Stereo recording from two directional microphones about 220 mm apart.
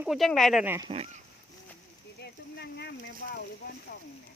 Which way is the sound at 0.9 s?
30° right (ahead or behind).